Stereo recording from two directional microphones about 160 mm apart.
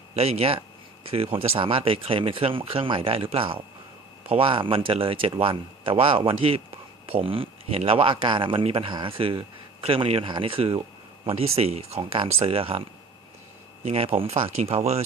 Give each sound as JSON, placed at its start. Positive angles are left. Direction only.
{"t": 0.1, "sound": "speech", "side_deg": -40}